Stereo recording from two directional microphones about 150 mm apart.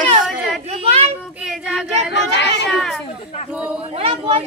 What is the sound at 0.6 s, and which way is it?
Speech, 45° right (ahead or behind).